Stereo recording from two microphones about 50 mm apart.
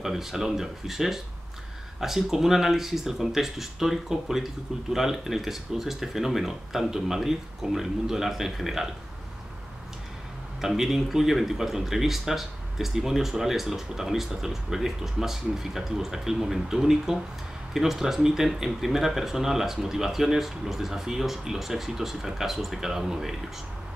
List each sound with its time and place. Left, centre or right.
0.0 s speech: centre
10.6 s speech: centre